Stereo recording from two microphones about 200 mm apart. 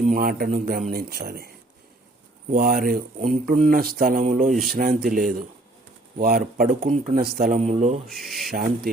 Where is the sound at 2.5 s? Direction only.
50° right (ahead or behind).